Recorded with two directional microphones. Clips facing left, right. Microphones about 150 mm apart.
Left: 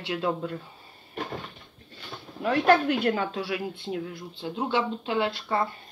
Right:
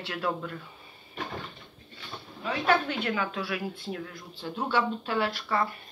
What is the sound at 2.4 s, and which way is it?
A woman's voice, 45° left (ahead or behind).